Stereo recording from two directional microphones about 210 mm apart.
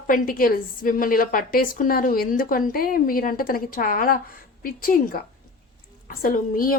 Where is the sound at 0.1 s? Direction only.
45° left (ahead or behind).